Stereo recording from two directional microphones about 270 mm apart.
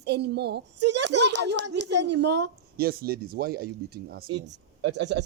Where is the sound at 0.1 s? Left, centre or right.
Right.